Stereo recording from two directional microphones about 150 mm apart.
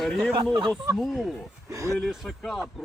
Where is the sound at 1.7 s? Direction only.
20° right (ahead or behind).